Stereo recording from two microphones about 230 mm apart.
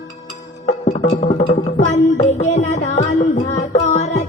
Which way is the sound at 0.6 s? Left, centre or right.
Left.